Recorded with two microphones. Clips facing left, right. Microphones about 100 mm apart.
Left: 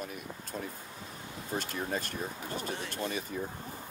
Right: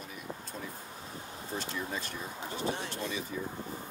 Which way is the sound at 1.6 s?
50° left (ahead or behind).